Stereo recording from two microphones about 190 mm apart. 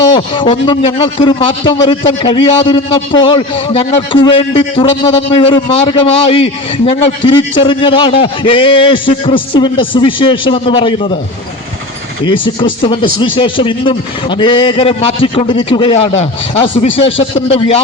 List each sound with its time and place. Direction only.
0.1 s a man's voice: 25° left (ahead or behind)
12.2 s a man's voice: 25° left (ahead or behind)